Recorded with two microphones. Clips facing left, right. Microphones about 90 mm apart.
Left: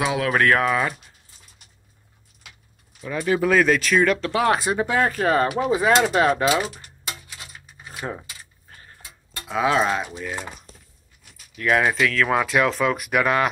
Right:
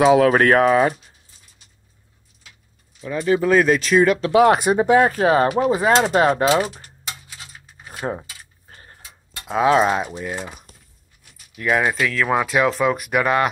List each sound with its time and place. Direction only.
0.0 s speech: 35° right (ahead or behind)
3.0 s speech: centre (ahead or behind)
4.4 s speech: 20° right (ahead or behind)
5.9 s speech: 30° right (ahead or behind)
7.8 s cutlery: 25° right (ahead or behind)
9.5 s speech: 20° right (ahead or behind)
11.5 s speech: 5° right (ahead or behind)